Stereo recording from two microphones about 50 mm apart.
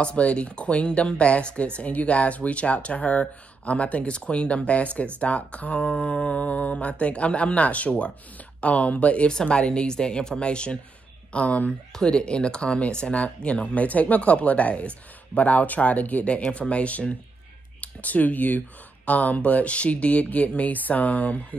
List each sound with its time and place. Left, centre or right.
0.0 s speech: left
11.9 s speech: centre; by 21.5 s left